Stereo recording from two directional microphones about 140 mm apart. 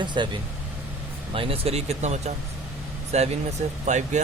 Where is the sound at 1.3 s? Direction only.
40° right (ahead or behind).